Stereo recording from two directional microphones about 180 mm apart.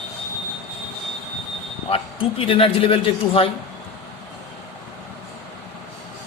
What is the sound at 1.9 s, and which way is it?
Speech, 30° left (ahead or behind).